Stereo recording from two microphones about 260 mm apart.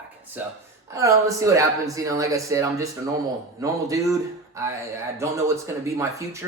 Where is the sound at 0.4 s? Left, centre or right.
Centre.